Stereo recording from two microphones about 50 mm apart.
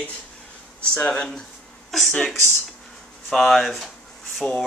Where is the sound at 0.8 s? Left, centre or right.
Left.